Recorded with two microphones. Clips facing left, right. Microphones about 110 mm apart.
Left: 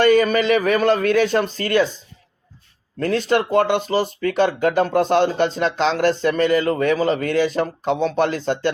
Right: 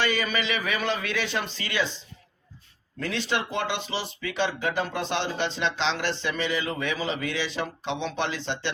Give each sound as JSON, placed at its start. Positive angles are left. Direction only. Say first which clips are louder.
{"t": 0.0, "sound": "speech", "louder": "left 12 dB", "side_deg": 45}
{"t": 3.0, "sound": "speech", "louder": "left 10 dB", "side_deg": 45}